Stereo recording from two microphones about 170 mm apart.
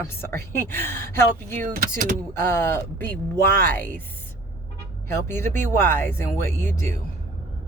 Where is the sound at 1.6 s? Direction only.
55° right (ahead or behind).